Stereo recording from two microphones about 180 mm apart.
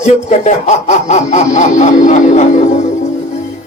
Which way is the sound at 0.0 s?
40° left (ahead or behind).